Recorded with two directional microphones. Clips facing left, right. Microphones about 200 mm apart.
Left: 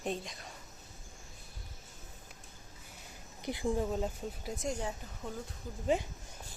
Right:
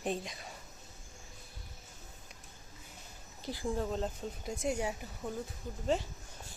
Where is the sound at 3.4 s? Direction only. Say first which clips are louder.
Left 2 dB; 20° left (ahead or behind).